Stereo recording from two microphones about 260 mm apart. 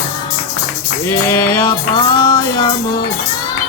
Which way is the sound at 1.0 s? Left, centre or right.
Centre.